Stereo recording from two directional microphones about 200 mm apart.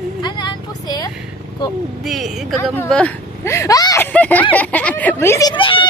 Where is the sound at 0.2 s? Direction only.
20° left (ahead or behind).